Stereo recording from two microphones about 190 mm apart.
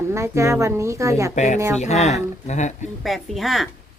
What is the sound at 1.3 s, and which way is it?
Speech, 40° left (ahead or behind).